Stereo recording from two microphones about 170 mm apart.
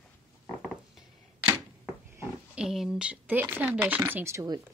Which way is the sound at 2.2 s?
5° right (ahead or behind).